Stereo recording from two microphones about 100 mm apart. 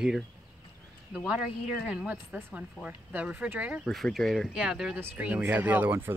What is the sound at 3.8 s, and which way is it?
Speech, centre (ahead or behind).